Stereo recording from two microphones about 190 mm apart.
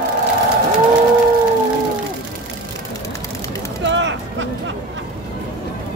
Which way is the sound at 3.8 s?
75° right (ahead or behind).